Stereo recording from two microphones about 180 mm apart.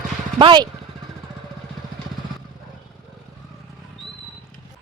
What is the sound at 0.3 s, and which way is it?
Speech, 25° right (ahead or behind).